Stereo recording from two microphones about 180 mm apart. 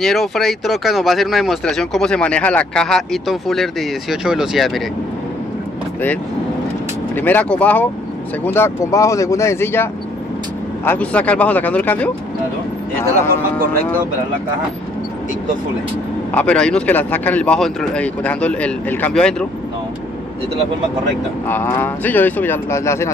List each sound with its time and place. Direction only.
0.0 s speech: centre (ahead or behind)
7.2 s speech: 10° left (ahead or behind)
10.9 s speech: 5° left (ahead or behind)
16.3 s speech: 5° left (ahead or behind)
21.5 s speech: 10° left (ahead or behind)